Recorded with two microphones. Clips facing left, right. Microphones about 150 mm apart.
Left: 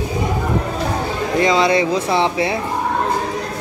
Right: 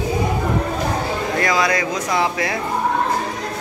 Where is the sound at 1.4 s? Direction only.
25° left (ahead or behind).